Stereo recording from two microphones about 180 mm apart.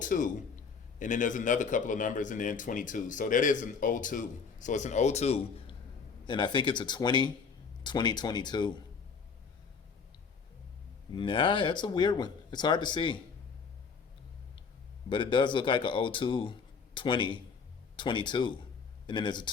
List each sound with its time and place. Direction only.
0.0 s a man's voice: 45° left (ahead or behind); by 8.7 s 25° left (ahead or behind)
11.1 s speech: 25° left (ahead or behind)
15.1 s speech: 25° left (ahead or behind)